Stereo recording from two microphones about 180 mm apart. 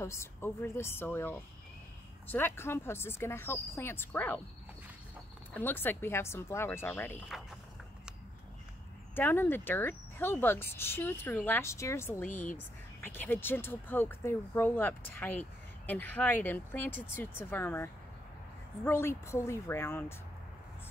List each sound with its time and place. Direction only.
0.0 s speech: 15° left (ahead or behind)
5.5 s speech: 10° left (ahead or behind)
9.1 s speech: 10° left (ahead or behind)
18.9 s speech: 15° left (ahead or behind)